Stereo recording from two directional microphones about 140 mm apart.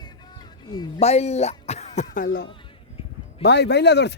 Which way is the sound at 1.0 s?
50° left (ahead or behind).